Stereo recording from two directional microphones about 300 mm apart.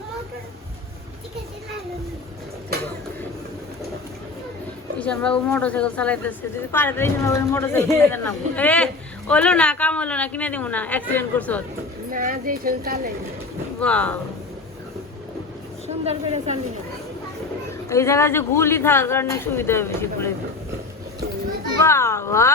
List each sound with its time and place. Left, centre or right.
4.9 s speech: centre
12.1 s speech: right
13.7 s speech: centre
15.9 s speech: right
17.8 s a man's voice: centre
21.8 s a man's voice: centre